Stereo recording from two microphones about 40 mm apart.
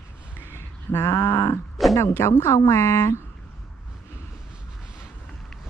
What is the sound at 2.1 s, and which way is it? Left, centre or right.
A woman's voice, left.